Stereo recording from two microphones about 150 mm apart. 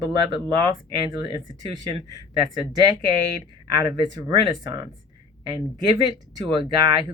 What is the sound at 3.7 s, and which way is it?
Speech, 25° right (ahead or behind).